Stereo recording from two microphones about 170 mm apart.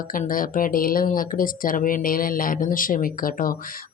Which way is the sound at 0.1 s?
55° left (ahead or behind).